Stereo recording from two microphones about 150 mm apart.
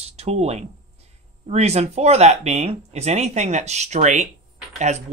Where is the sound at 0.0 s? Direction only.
45° right (ahead or behind).